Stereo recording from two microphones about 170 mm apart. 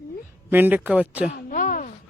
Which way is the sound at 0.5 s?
10° right (ahead or behind).